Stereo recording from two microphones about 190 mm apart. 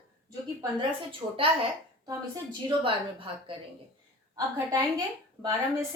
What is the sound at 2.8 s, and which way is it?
Speech, 25° right (ahead or behind).